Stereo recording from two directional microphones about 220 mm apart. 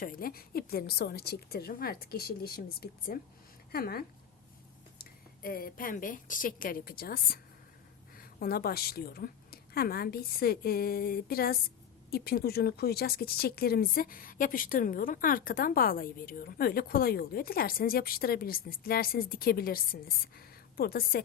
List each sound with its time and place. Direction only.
0.0 s a woman's voice: 40° left (ahead or behind)
8.4 s speech: 45° left (ahead or behind)